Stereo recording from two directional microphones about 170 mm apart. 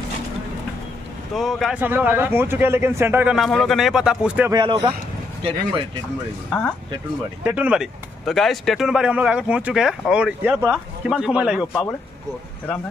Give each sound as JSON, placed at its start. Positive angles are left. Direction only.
{"t": 1.3, "sound": "speech", "side_deg": 0}
{"t": 1.8, "sound": "speech", "side_deg": -10}
{"t": 3.3, "sound": "speech", "side_deg": 0}
{"t": 4.5, "sound": "speech", "side_deg": -25}
{"t": 6.5, "sound": "speech", "side_deg": 0}